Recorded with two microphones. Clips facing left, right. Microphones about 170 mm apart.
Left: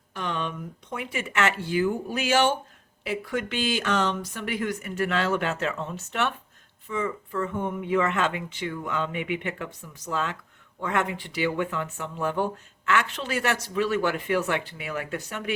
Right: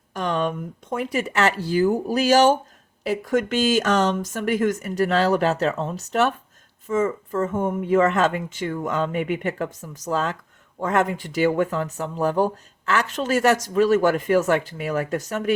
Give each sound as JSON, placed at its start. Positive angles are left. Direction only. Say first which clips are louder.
{"t": 0.1, "sound": "speech", "louder": "right 7 dB", "side_deg": -45}